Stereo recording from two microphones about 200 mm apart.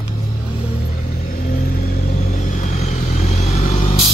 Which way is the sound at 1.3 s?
45° left (ahead or behind).